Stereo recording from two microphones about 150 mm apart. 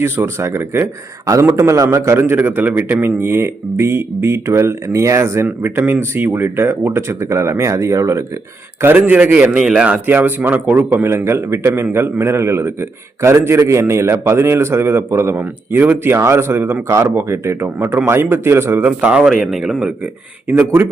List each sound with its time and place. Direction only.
0.0 s a man's voice: 15° right (ahead or behind)
20.5 s a man's voice: 15° right (ahead or behind)